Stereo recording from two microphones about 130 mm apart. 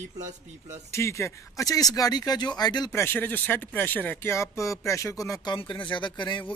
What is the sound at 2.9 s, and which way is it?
Speech, 20° left (ahead or behind).